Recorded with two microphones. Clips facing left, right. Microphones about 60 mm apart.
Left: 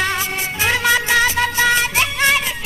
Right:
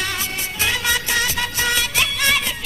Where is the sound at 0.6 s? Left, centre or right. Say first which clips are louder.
Left 5 dB; left.